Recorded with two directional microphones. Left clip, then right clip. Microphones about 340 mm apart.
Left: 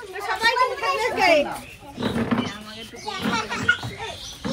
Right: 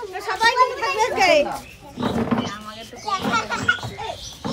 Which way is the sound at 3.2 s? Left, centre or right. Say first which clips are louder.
Even; centre.